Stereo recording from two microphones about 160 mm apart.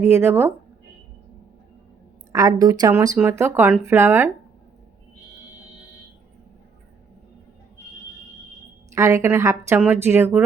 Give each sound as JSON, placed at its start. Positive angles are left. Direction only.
{"t": 0.0, "sound": "a woman's voice", "side_deg": -15}
{"t": 2.3, "sound": "a woman's voice", "side_deg": -25}
{"t": 8.9, "sound": "a woman's voice", "side_deg": -20}